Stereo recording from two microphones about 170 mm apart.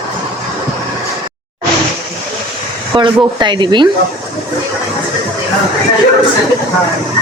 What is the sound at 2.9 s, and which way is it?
Speech, 25° right (ahead or behind).